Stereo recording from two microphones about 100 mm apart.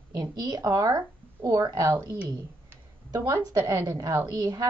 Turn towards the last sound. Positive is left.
turn(degrees=-35)  # may be behind; listen again after turning